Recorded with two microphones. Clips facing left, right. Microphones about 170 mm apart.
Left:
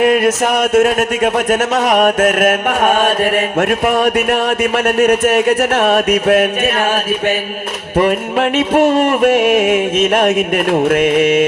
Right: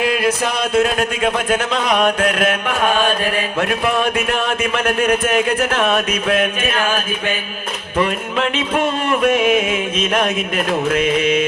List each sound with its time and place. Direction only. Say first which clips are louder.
0.0 s music: left 6 dB; 50° left (ahead or behind)
7.9 s music: left 5 dB; 45° left (ahead or behind)